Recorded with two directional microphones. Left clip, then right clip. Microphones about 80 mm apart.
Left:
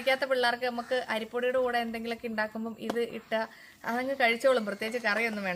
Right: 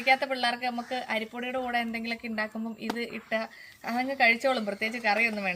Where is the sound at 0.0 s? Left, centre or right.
Left.